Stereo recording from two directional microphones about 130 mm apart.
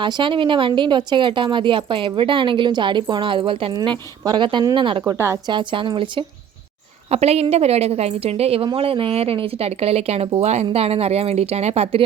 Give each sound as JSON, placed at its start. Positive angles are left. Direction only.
{"t": 0.0, "sound": "a woman's voice", "side_deg": -40}
{"t": 7.1, "sound": "a woman's voice", "side_deg": -55}